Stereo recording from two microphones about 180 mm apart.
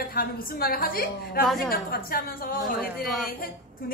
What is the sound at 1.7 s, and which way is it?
A woman's voice, 55° left (ahead or behind).